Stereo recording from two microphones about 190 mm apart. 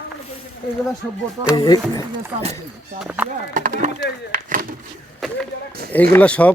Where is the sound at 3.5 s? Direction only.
45° right (ahead or behind).